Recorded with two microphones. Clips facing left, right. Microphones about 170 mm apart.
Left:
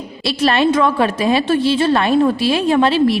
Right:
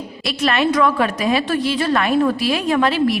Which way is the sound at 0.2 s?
30° left (ahead or behind).